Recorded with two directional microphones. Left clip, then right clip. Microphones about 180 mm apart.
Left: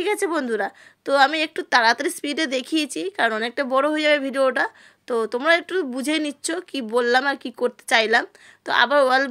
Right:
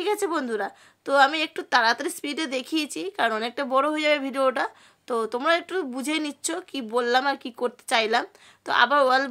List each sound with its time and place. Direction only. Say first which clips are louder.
0.0 s a woman's voice: left 3 dB; 20° left (ahead or behind)